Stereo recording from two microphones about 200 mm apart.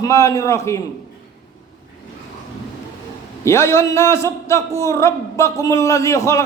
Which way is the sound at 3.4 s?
15° left (ahead or behind).